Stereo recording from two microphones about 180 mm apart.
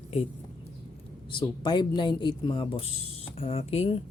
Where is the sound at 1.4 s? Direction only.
25° left (ahead or behind).